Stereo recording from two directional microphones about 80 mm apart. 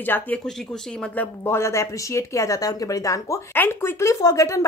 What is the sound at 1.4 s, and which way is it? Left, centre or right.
Speech, left.